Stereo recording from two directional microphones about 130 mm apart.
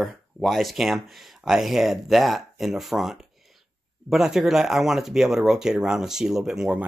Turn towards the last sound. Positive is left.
turn(degrees=-5)  # may be behind; listen again after turning